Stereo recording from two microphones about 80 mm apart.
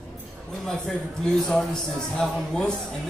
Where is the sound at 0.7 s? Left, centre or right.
Centre.